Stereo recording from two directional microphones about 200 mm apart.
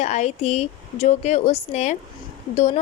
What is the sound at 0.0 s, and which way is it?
Speech, 35° left (ahead or behind).